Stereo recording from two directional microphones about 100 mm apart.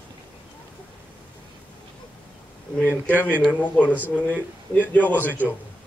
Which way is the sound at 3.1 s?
20° right (ahead or behind).